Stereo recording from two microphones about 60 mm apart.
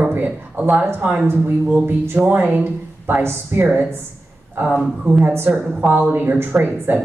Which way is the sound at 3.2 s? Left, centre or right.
Right.